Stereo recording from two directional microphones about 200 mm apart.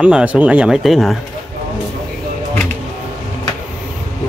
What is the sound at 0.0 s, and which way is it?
Speech, 5° right (ahead or behind).